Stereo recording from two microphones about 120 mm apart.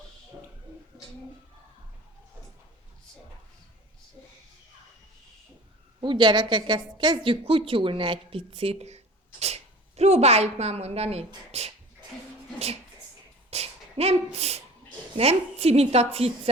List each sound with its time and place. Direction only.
6.0 s a woman's voice: 40° right (ahead or behind); by 11.7 s 60° right (ahead or behind)
13.5 s a sound: 60° right (ahead or behind)
15.2 s a woman's voice: 60° right (ahead or behind)